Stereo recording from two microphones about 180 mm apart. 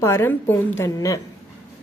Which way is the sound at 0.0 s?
15° left (ahead or behind).